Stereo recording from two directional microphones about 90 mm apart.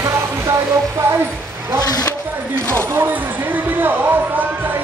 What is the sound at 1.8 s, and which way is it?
Speech, 50° left (ahead or behind).